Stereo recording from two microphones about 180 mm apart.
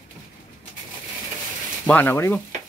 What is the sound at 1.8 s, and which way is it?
Speech, 10° left (ahead or behind).